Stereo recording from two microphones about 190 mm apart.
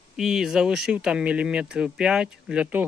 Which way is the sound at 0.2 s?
Centre (ahead or behind).